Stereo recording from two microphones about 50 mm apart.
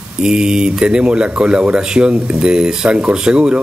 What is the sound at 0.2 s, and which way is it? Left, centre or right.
Speech, centre.